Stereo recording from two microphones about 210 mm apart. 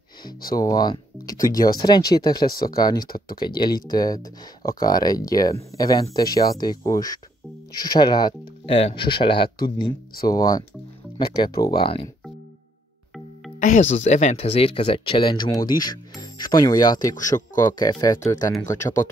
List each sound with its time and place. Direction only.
0.2 s speech: 45° left (ahead or behind)
0.6 s speech: 20° left (ahead or behind)
1.4 s speech: 45° left (ahead or behind)
2.1 s speech: 30° left (ahead or behind)
2.7 s speech: 20° left (ahead or behind)
13.6 s speech: 35° left (ahead or behind); by 18.9 s 15° left (ahead or behind)